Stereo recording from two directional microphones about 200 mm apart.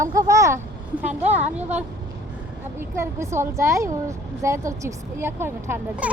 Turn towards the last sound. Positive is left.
turn(degrees=-10)  # may be behind; listen again after turning